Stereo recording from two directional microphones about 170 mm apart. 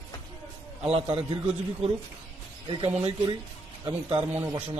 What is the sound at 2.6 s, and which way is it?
Speech, 35° right (ahead or behind).